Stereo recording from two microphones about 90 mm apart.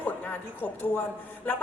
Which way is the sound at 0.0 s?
20° left (ahead or behind).